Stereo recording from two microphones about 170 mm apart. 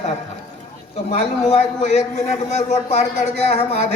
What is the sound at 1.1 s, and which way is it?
A man's voice, 45° left (ahead or behind).